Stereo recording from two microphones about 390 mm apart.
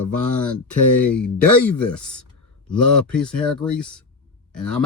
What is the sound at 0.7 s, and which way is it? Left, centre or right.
Speech, left.